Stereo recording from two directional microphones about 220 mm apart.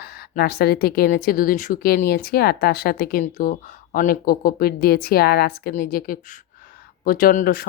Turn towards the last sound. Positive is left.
turn(degrees=40)  # may be behind; listen again after turning